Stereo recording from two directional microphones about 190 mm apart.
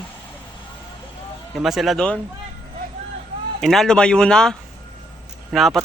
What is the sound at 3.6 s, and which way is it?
Speech, centre (ahead or behind).